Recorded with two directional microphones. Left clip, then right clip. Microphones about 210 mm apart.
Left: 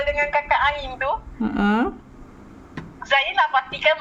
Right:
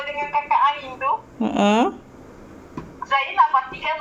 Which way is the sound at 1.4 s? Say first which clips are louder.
Right 5 dB; 25° left (ahead or behind).